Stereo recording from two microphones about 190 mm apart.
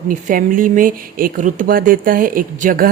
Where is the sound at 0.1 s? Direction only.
45° right (ahead or behind).